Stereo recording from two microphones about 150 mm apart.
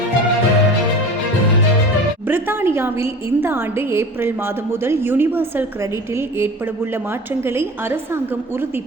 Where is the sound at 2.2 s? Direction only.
15° right (ahead or behind).